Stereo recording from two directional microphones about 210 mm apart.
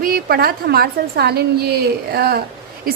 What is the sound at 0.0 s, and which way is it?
A woman's voice, 45° right (ahead or behind).